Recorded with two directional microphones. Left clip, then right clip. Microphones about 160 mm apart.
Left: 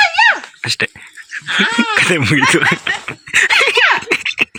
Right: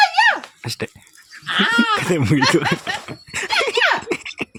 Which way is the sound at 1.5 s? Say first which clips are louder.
Left 3 dB; 25° right (ahead or behind).